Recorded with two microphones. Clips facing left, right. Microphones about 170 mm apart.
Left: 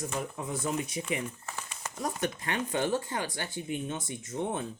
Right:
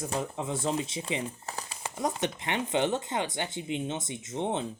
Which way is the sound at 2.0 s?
20° right (ahead or behind).